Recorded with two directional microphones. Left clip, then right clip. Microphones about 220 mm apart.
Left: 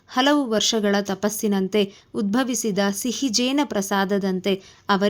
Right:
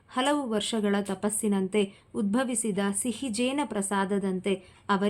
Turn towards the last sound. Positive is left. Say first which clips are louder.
# left 6 dB
turn(degrees=30)  # may be behind; listen again after turning